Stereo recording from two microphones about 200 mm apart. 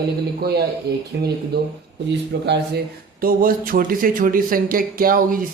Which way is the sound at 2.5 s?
50° right (ahead or behind).